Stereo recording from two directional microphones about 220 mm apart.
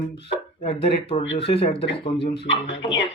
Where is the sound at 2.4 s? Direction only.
55° left (ahead or behind).